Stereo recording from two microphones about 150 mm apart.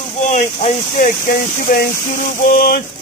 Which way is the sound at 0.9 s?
75° left (ahead or behind).